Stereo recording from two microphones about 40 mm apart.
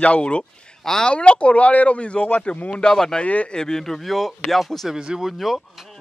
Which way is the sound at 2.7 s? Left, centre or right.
Left.